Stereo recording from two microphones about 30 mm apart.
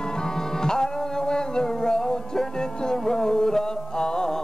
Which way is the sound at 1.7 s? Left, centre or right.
Centre.